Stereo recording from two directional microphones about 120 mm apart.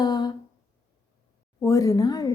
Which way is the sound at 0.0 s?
35° left (ahead or behind).